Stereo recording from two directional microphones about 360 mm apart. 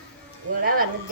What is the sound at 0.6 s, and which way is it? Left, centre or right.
Speech, right.